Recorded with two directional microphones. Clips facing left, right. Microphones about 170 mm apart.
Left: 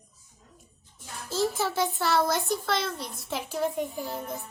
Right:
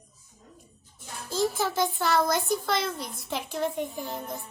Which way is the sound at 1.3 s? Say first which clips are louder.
Even; centre (ahead or behind).